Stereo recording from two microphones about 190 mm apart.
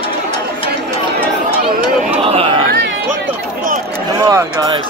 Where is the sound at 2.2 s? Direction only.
30° right (ahead or behind).